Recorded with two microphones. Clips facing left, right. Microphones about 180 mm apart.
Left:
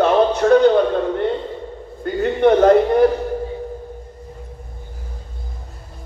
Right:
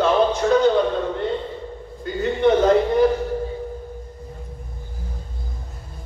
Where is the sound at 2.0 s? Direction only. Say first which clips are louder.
Left 3 dB; 60° left (ahead or behind).